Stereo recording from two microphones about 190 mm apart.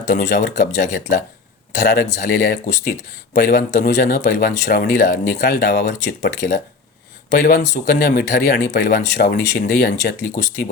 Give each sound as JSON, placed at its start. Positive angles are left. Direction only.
{"t": 0.2, "sound": "speech", "side_deg": 60}
{"t": 0.8, "sound": "speech", "side_deg": 40}
{"t": 1.8, "sound": "speech", "side_deg": 55}
{"t": 5.8, "sound": "speech", "side_deg": 45}